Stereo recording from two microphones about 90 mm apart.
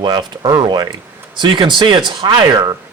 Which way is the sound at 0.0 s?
50° right (ahead or behind).